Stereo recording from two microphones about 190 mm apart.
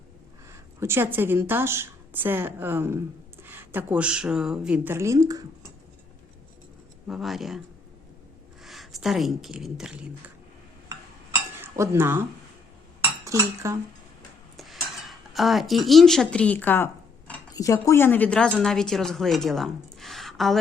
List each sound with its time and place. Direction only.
0.5 s speech: 15° right (ahead or behind)
7.1 s a woman's voice: centre (ahead or behind)
8.6 s speech: centre (ahead or behind)
11.6 s speech: 10° right (ahead or behind)
13.2 s speech: 15° right (ahead or behind)
14.5 s cutlery: centre (ahead or behind)
17.5 s a woman's voice: 15° left (ahead or behind); by 20.6 s centre (ahead or behind)